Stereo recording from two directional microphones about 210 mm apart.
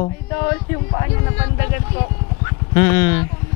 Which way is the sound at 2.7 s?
10° left (ahead or behind).